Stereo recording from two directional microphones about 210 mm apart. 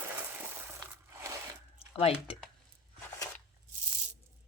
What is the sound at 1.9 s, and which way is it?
Speech, 25° left (ahead or behind).